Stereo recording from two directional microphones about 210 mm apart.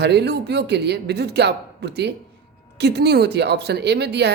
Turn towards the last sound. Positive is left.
turn(degrees=-55)  # may be behind; listen again after turning